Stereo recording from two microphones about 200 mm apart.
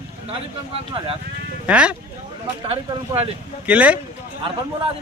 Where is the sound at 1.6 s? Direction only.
5° right (ahead or behind).